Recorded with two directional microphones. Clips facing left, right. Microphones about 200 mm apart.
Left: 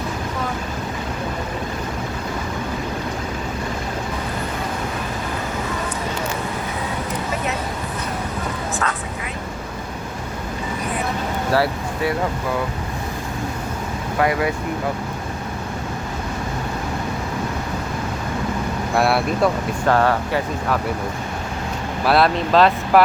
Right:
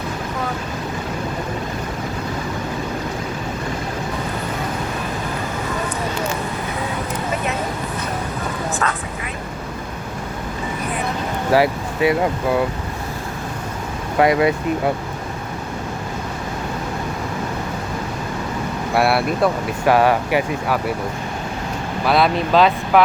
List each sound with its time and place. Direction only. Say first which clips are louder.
11.5 s a sound: right 4 dB; 15° right (ahead or behind)
14.2 s speech: right 5 dB; 20° right (ahead or behind)
18.9 s speech: right 1 dB; 5° right (ahead or behind)
22.0 s speech: even; centre (ahead or behind)